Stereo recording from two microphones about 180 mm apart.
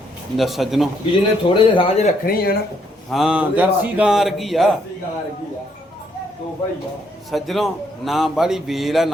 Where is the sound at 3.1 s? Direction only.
Centre (ahead or behind).